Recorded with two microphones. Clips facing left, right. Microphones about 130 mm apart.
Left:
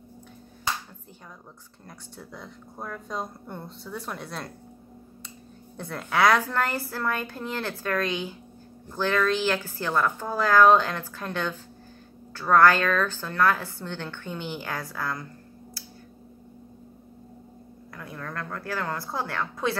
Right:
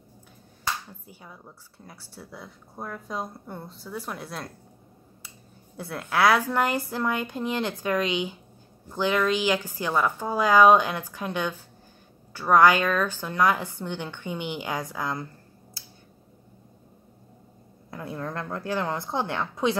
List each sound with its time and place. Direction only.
1.9 s speech: 5° right (ahead or behind)
5.8 s a woman's voice: 5° right (ahead or behind)
15.8 s finger snapping: 25° right (ahead or behind)
17.9 s a woman's voice: 25° right (ahead or behind)